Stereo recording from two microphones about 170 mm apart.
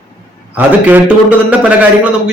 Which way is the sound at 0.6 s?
10° right (ahead or behind).